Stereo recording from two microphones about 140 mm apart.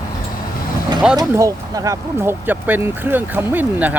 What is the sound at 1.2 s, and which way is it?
Speech, 25° right (ahead or behind).